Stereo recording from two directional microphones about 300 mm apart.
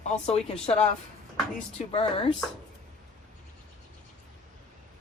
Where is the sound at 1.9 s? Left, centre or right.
Centre.